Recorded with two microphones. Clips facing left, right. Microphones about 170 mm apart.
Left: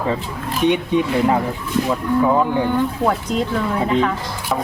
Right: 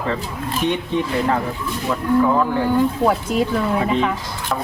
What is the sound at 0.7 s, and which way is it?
Speech, 15° left (ahead or behind).